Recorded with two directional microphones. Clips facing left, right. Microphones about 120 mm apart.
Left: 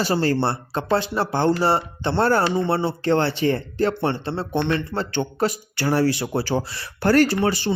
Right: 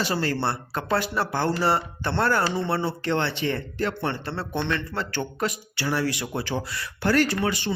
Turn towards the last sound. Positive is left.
turn(degrees=35)  # may be behind; listen again after turning